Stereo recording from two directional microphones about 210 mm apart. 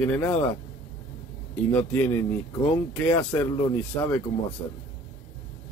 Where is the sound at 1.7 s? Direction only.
10° left (ahead or behind).